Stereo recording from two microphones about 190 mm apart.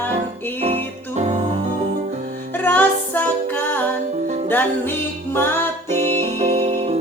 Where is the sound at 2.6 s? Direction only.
10° left (ahead or behind).